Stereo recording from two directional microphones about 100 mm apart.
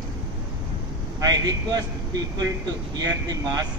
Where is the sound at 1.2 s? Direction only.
40° right (ahead or behind).